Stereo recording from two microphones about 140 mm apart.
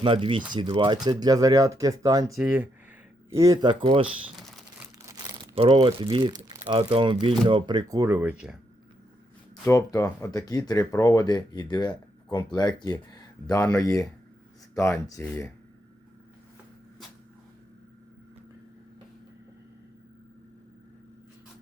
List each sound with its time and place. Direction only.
0.0 s speech: 40° right (ahead or behind)
2.4 s speech: 10° right (ahead or behind)
3.3 s speech: 25° right (ahead or behind); by 4.1 s 40° right (ahead or behind)
4.8 s crumpling: 20° right (ahead or behind)
5.5 s speech: 40° right (ahead or behind)
8.1 s speech: 10° right (ahead or behind)
9.6 s speech: 25° left (ahead or behind)